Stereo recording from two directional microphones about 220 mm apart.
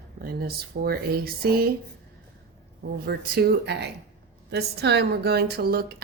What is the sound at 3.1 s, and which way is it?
Speech, 50° right (ahead or behind).